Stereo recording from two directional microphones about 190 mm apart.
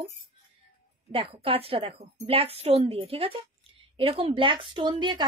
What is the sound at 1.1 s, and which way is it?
A woman's voice, 30° right (ahead or behind).